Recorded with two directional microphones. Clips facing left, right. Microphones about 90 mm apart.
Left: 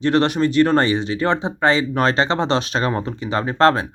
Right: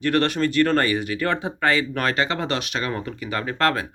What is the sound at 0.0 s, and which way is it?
Speech, 20° left (ahead or behind).